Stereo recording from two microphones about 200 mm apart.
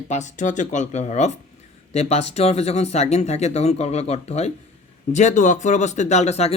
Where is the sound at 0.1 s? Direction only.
35° left (ahead or behind).